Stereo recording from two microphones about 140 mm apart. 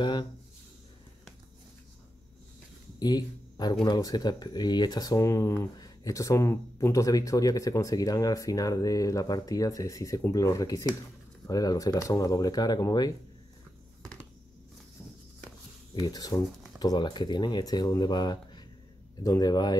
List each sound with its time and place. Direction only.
0.0 s speech: 35° left (ahead or behind)
3.0 s speech: 30° left (ahead or behind)
15.9 s speech: 30° left (ahead or behind)